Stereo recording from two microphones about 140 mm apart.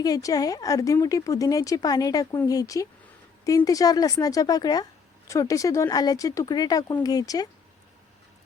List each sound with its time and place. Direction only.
0.0 s speech: 25° left (ahead or behind)